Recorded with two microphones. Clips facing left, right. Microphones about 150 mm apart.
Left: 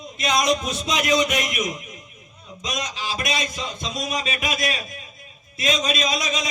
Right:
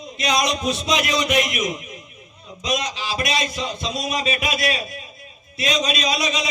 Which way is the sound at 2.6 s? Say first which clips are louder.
Right 4 dB; 45° left (ahead or behind).